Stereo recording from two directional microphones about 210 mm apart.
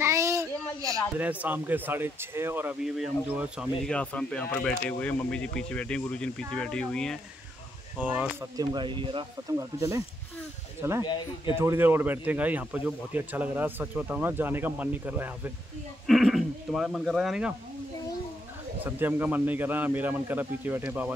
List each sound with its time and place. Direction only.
0.0 s a sound: 15° right (ahead or behind)
0.8 s speech: 5° right (ahead or behind)
8.0 s speech: 5° right (ahead or behind)
8.5 s speech: 20° right (ahead or behind); by 17.6 s 5° right (ahead or behind)
18.9 s speech: 10° right (ahead or behind)